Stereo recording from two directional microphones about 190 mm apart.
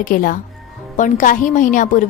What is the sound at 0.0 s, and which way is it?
A woman's voice, 45° left (ahead or behind).